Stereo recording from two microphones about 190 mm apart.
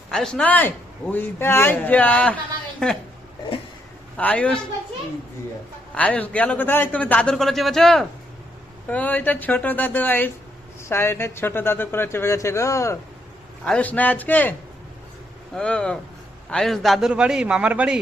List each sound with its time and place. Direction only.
0.1 s a man's voice: 5° left (ahead or behind)
4.2 s a man's voice: 10° left (ahead or behind)
5.9 s a man's voice: 5° left (ahead or behind)
15.5 s a man's voice: 5° left (ahead or behind)